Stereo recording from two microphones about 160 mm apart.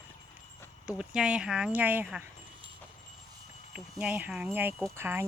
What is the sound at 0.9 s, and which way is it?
Speech, 5° right (ahead or behind).